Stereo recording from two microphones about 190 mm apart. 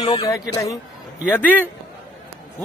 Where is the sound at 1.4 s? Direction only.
10° left (ahead or behind).